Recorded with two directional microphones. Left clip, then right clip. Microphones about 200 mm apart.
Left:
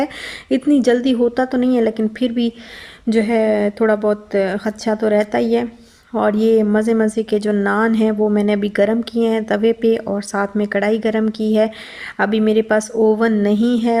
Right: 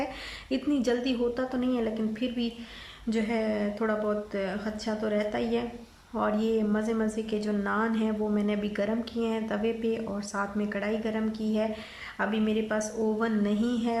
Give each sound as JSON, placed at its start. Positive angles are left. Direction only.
{"t": 0.5, "sound": "a woman's voice", "side_deg": 40}